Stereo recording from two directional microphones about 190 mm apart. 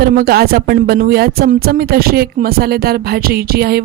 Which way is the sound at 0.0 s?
50° right (ahead or behind).